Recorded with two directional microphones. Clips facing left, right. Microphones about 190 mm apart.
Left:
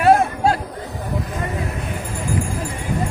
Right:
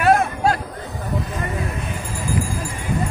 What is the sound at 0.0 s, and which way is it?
Chatter, 25° left (ahead or behind).